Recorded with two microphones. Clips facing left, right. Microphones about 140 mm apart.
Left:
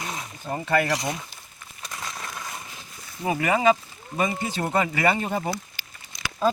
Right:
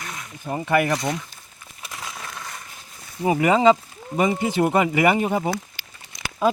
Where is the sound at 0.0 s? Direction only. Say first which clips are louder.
Left 3 dB; 25° left (ahead or behind).